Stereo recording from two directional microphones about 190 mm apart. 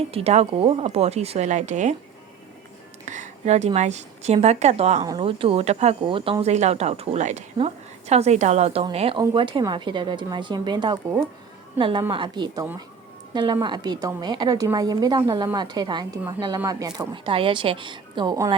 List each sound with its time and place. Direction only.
0.0 s speech: 30° right (ahead or behind)
3.1 s a woman's voice: 40° right (ahead or behind); by 18.5 s 20° right (ahead or behind)